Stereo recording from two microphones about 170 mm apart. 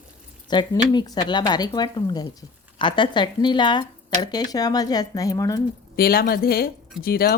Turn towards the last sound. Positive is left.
turn(degrees=60)  # may be behind; listen again after turning